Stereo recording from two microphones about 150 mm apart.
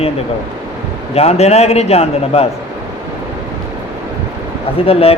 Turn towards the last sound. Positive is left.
turn(degrees=40)  # may be behind; listen again after turning